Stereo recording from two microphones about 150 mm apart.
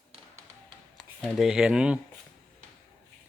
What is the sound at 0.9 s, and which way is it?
Speech, centre (ahead or behind).